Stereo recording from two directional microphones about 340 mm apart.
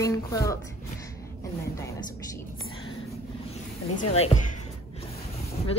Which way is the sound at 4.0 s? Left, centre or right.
Centre.